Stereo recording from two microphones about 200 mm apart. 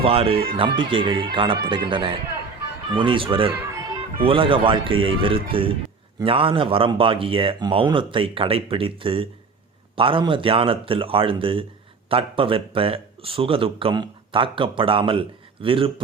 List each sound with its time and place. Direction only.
0.0 s speech: 30° right (ahead or behind)